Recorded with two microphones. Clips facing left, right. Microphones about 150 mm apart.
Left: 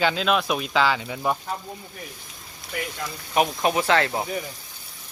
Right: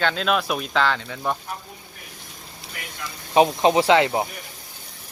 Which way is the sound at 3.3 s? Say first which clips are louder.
Right 5 dB; 25° right (ahead or behind).